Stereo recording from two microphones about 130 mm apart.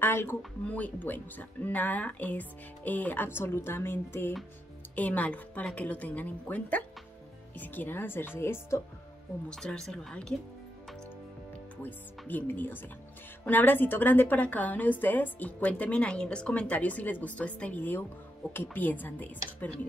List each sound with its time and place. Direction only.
0.0 s a sound: 15° left (ahead or behind)
0.7 s a woman's voice: 10° left (ahead or behind)
9.5 s speech: 5° left (ahead or behind)
11.8 s a woman's voice: 15° left (ahead or behind)